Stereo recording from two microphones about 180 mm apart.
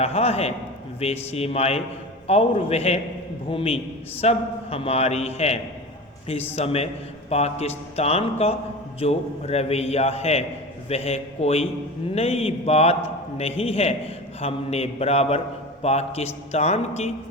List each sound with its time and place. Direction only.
0.0 s a man's voice: 35° left (ahead or behind)
6.6 s a man's voice: 35° left (ahead or behind)